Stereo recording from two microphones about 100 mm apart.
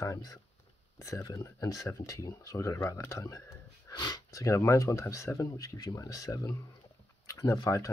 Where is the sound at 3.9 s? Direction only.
45° left (ahead or behind).